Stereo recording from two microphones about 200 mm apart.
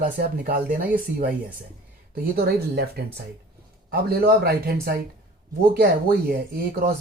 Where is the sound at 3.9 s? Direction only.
50° right (ahead or behind).